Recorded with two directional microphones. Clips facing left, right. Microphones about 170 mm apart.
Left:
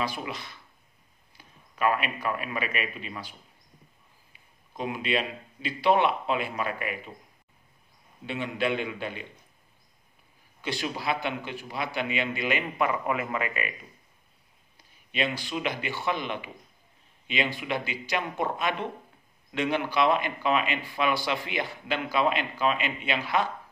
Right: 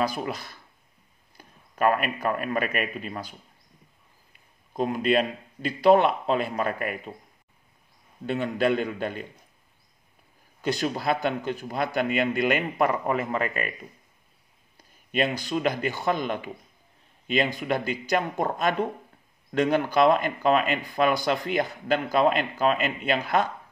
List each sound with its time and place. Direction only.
0.0 s a man's voice: 40° right (ahead or behind)
8.3 s speech: 45° right (ahead or behind)
10.6 s speech: 45° right (ahead or behind)
15.0 s speech: 45° right (ahead or behind)
17.6 s speech: 45° right (ahead or behind)